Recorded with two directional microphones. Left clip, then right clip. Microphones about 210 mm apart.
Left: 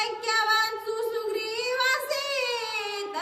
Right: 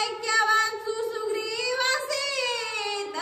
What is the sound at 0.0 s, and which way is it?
Child singing, 15° left (ahead or behind).